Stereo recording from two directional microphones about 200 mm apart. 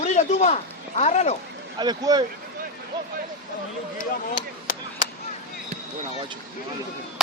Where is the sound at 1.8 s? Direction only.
20° right (ahead or behind).